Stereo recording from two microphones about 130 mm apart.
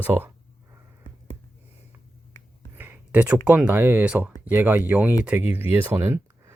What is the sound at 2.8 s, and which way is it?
Speech, 15° right (ahead or behind).